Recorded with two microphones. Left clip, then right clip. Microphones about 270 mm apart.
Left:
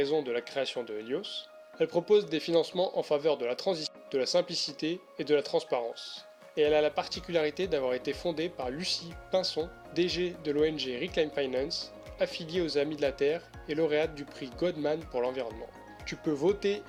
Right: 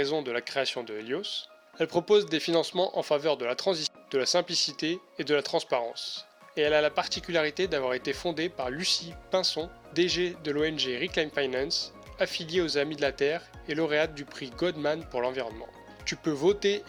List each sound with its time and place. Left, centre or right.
0.0 s speech: right